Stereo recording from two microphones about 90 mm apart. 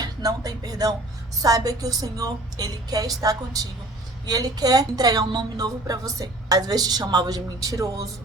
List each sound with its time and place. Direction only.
0.0 s a woman's voice: 45° right (ahead or behind)